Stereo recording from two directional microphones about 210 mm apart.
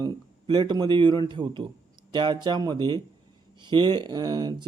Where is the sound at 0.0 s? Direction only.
20° right (ahead or behind).